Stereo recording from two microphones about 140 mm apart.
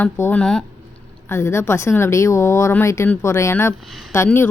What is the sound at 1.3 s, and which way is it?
Speech, 20° left (ahead or behind).